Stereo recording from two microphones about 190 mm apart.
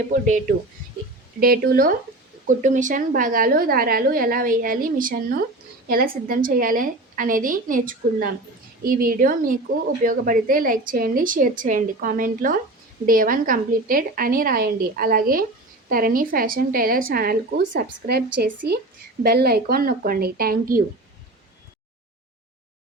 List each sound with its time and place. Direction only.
0.1 s a woman's voice: 40° right (ahead or behind)